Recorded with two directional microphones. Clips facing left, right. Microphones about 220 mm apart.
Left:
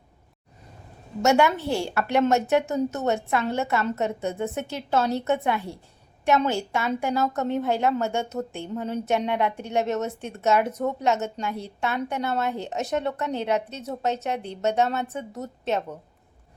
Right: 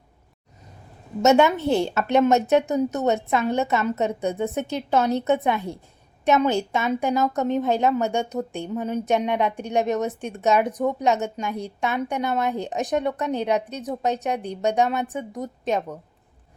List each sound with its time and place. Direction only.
1.2 s a woman's voice: 20° right (ahead or behind)